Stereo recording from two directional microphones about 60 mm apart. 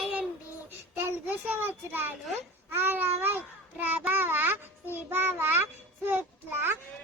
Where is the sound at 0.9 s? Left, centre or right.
Right.